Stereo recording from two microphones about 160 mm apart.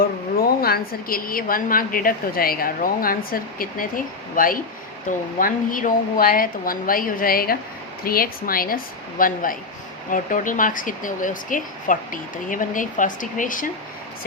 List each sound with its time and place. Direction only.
0.3 s a woman's voice: 70° left (ahead or behind); by 13.7 s 55° left (ahead or behind)